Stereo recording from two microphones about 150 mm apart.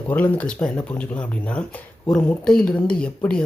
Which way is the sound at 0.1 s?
10° left (ahead or behind).